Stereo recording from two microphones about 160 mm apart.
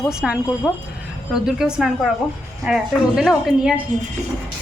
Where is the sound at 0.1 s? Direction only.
5° right (ahead or behind).